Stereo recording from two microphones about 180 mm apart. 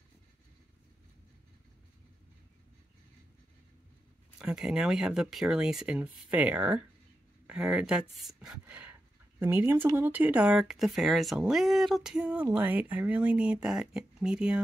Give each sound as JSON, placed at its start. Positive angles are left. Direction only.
{"t": 4.4, "sound": "speech", "side_deg": -5}